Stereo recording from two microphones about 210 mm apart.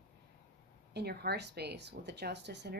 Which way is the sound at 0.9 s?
50° right (ahead or behind).